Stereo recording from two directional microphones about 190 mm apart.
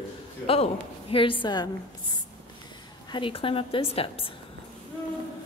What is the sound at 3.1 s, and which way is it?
A woman's voice, 30° left (ahead or behind).